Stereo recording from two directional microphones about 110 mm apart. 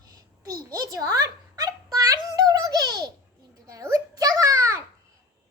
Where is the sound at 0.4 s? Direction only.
30° right (ahead or behind).